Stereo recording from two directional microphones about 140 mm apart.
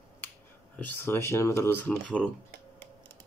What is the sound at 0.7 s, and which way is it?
Speech, 15° left (ahead or behind).